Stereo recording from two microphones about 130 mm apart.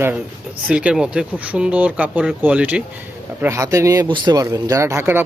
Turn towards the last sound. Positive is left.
turn(degrees=-20)  # may be behind; listen again after turning